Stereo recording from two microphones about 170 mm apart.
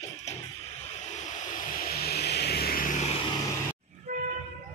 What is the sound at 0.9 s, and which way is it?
Vehicle, 45° left (ahead or behind).